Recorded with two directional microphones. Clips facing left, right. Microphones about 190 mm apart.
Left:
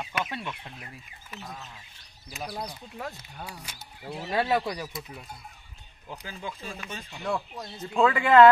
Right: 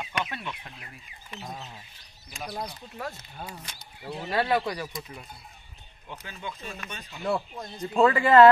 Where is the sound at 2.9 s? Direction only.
15° left (ahead or behind).